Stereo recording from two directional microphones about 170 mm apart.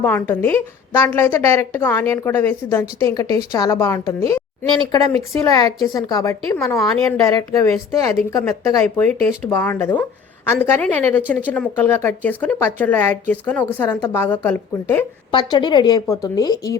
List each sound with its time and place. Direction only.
0.0 s a woman's voice: 15° left (ahead or behind)
15.3 s a woman's voice: 25° left (ahead or behind)